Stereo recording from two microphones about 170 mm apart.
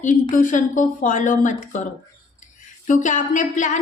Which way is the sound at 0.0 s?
50° left (ahead or behind).